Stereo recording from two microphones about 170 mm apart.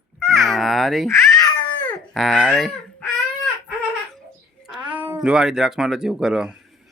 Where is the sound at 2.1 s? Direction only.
Centre (ahead or behind).